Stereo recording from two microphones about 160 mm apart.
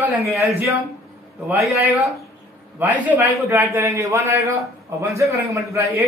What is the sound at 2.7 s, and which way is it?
A man's voice, 10° right (ahead or behind).